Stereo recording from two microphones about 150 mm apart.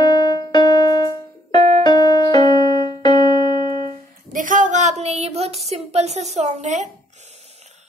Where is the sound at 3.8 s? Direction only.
60° right (ahead or behind).